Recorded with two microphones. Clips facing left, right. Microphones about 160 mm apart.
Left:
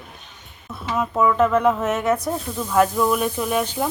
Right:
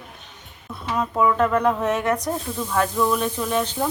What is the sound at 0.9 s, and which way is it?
A woman's voice, centre (ahead or behind).